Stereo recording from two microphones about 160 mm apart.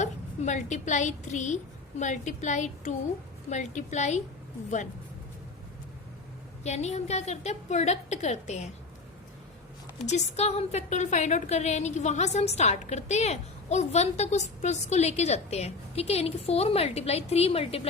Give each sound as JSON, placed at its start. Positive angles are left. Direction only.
{"t": 0.0, "sound": "a woman's voice", "side_deg": 50}
{"t": 6.6, "sound": "a woman's voice", "side_deg": 45}
{"t": 10.1, "sound": "a woman's voice", "side_deg": 45}